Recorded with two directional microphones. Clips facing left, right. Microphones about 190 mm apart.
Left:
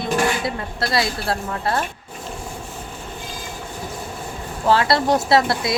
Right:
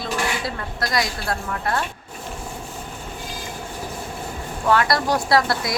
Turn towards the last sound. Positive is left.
turn(degrees=25)  # may be behind; listen again after turning